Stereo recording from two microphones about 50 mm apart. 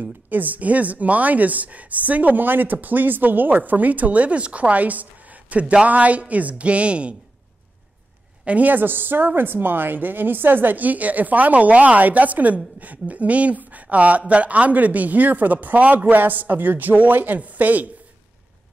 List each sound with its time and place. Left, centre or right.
0.0 s a woman's voice: right
8.5 s a woman's voice: right